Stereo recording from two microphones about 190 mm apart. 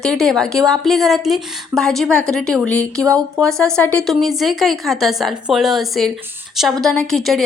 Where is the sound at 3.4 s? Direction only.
5° left (ahead or behind).